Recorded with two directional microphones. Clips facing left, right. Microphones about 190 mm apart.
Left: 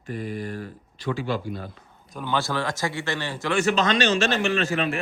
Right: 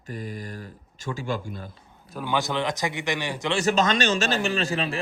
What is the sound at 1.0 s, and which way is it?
Speech, 45° right (ahead or behind).